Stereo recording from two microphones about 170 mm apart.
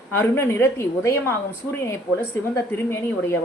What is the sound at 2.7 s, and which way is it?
Speech, 15° left (ahead or behind).